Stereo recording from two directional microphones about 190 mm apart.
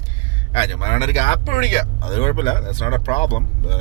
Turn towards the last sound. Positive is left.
turn(degrees=40)  # may be behind; listen again after turning